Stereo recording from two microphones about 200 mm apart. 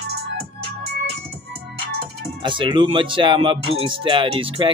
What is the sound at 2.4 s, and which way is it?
Speech, 25° right (ahead or behind).